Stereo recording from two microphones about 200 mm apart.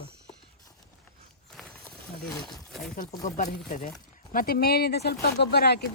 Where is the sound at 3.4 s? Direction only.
40° left (ahead or behind).